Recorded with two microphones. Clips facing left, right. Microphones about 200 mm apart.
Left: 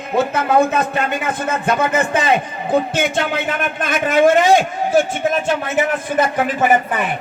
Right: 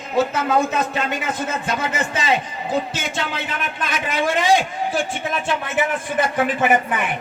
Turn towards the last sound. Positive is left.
turn(degrees=40)  # may be behind; listen again after turning